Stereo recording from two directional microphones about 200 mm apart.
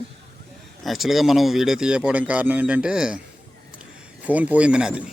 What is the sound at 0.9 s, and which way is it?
Speech, centre (ahead or behind).